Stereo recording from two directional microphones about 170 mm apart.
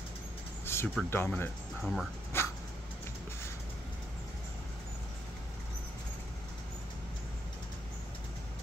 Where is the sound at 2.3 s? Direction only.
15° left (ahead or behind).